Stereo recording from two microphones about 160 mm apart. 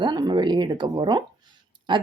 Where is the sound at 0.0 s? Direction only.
30° right (ahead or behind).